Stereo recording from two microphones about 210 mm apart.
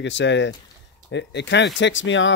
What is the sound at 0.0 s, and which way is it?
Speech, 60° left (ahead or behind).